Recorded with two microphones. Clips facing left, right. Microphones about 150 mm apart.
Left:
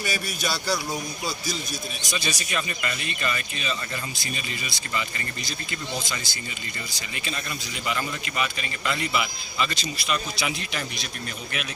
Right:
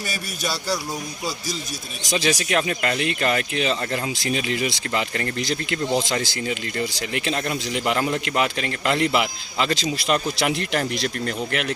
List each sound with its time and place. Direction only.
2.0 s speech: 90° right